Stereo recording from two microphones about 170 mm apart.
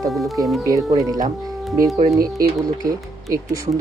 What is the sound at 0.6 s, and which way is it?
Speech, 20° right (ahead or behind).